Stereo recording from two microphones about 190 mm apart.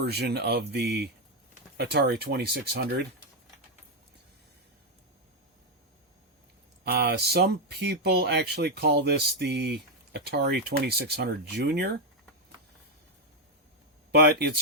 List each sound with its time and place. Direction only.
0.0 s speech: 60° right (ahead or behind)
6.8 s speech: 60° right (ahead or behind)
14.1 s speech: 60° right (ahead or behind)